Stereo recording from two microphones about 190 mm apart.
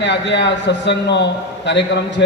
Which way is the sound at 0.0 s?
70° left (ahead or behind).